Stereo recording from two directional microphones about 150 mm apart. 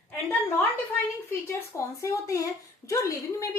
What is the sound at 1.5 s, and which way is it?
A woman's voice, 20° left (ahead or behind).